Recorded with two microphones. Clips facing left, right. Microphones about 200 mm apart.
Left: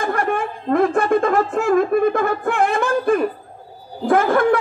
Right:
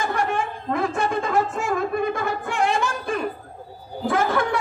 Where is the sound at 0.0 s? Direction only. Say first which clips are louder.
Left 3 dB; 55° left (ahead or behind).